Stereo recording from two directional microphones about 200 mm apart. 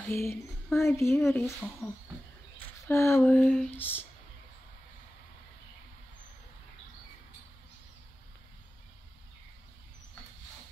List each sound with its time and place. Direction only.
0.1 s speech: 10° left (ahead or behind)
2.9 s speech: 15° left (ahead or behind)